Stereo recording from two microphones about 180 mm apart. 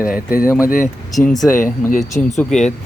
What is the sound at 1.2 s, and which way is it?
Speech, centre (ahead or behind).